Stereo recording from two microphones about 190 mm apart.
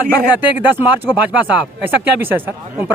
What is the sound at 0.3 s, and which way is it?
Speech, 10° right (ahead or behind).